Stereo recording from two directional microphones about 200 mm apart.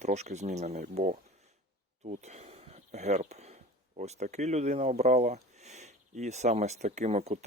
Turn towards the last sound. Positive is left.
turn(degrees=-35)  # may be behind; listen again after turning